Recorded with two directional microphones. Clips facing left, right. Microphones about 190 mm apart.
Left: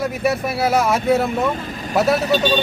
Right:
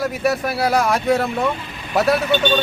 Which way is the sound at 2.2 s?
35° left (ahead or behind).